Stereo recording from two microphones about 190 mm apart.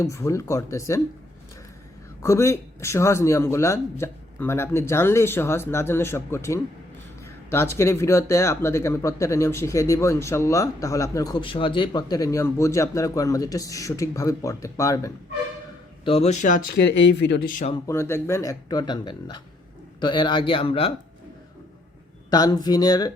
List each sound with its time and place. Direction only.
0.0 s speech: 15° left (ahead or behind)
2.2 s speech: 15° left (ahead or behind)
16.0 s speech: 35° left (ahead or behind); by 17.5 s 65° left (ahead or behind)
17.8 s a man's voice: 15° left (ahead or behind); by 20.9 s 30° left (ahead or behind)
22.3 s a man's voice: 20° left (ahead or behind)